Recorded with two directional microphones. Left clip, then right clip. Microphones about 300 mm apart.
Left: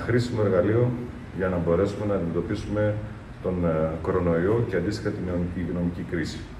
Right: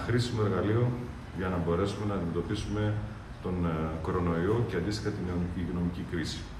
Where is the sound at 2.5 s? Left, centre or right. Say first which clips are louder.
Left 8 dB; centre.